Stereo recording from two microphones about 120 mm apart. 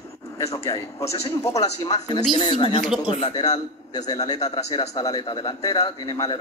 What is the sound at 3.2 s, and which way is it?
A man's voice, 30° left (ahead or behind).